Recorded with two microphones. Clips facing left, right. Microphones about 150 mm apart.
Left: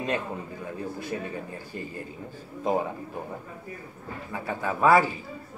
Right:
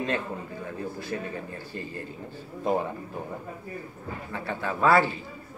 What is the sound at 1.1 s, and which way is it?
Speech, 20° left (ahead or behind).